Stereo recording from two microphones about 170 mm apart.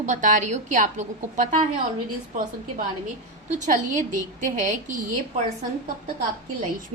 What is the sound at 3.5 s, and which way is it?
A woman's voice, 45° right (ahead or behind).